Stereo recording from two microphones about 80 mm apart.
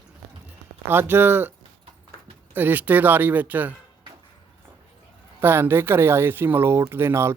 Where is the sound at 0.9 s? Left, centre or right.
Right.